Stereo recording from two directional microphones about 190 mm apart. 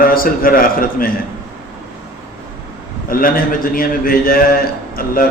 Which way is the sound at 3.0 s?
50° left (ahead or behind).